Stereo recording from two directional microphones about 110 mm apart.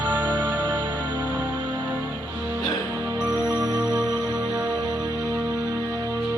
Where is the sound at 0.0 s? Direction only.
15° right (ahead or behind).